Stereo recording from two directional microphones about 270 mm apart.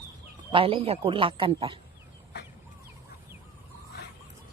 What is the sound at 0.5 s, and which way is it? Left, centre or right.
A man's voice, right.